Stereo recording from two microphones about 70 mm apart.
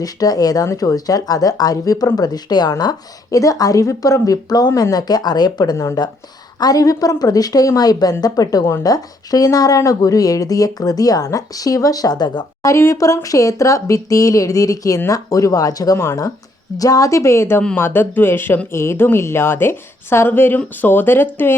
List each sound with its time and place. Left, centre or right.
0.0 s speech: left
3.3 s speech: left
5.7 s a woman's voice: left
6.6 s speech: left
12.6 s a woman's voice: left